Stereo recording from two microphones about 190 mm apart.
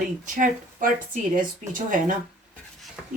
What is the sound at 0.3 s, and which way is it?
Speech, 45° right (ahead or behind).